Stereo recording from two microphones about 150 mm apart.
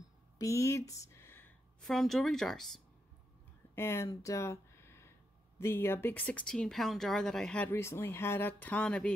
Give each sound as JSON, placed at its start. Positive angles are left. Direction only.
{"t": 0.4, "sound": "speech", "side_deg": 20}
{"t": 3.7, "sound": "speech", "side_deg": 15}